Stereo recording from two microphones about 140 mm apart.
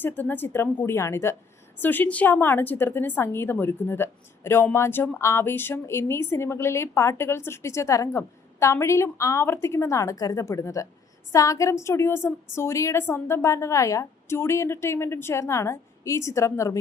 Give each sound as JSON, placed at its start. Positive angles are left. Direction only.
{"t": 0.0, "sound": "a woman's voice", "side_deg": 15}